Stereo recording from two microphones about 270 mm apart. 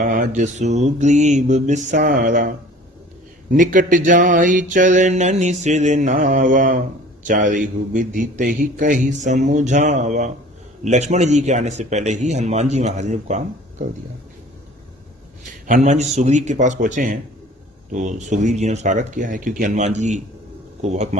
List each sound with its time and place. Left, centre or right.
0.0 s mantra: right
15.6 s mantra: right